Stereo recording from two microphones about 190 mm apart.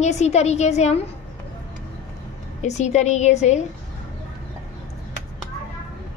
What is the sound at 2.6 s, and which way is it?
A woman's voice, 35° left (ahead or behind).